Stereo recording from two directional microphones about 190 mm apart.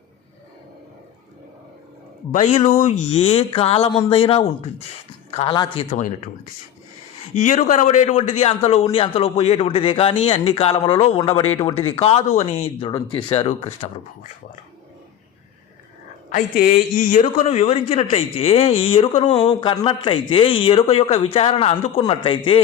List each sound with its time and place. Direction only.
2.3 s a man's voice: 40° left (ahead or behind)
6.0 s a man's voice: 40° left (ahead or behind)
7.3 s a man's voice: 40° left (ahead or behind)
16.3 s a man's voice: 45° left (ahead or behind); by 22.6 s 25° left (ahead or behind)